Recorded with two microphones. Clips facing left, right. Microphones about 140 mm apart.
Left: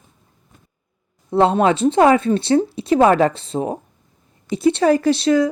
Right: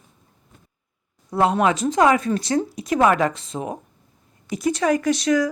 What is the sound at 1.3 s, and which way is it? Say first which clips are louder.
A woman's voice: left 4 dB; 25° left (ahead or behind).